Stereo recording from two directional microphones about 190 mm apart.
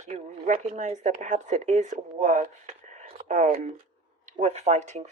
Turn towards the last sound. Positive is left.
turn(degrees=-35)  # may be behind; listen again after turning